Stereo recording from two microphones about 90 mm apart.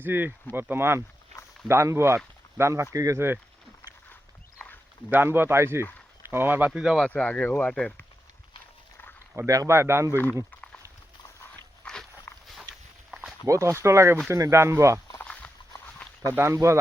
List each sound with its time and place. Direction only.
0.0 s speech: 20° right (ahead or behind)
5.1 s speech: 25° right (ahead or behind)
6.7 s speech: 5° right (ahead or behind)
7.0 s speech: 10° left (ahead or behind)
9.5 s speech: 35° right (ahead or behind)
11.9 s a sound: 10° left (ahead or behind)
12.3 s walk: 30° left (ahead or behind)
13.4 s speech: 35° right (ahead or behind)
15.2 s a sound: 15° left (ahead or behind)
16.3 s speech: 30° right (ahead or behind)